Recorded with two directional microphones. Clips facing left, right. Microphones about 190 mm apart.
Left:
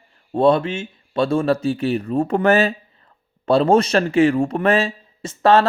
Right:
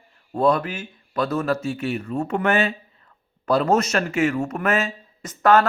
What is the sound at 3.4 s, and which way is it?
Speech, 30° left (ahead or behind).